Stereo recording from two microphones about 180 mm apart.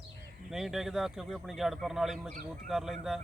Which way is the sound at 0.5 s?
Centre (ahead or behind).